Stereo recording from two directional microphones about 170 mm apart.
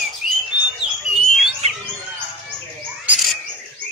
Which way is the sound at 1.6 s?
40° right (ahead or behind).